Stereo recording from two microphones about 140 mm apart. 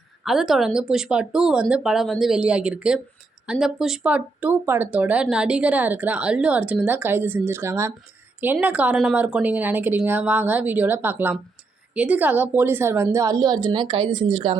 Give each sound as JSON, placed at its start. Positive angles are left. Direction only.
{"t": 0.3, "sound": "a woman's voice", "side_deg": 0}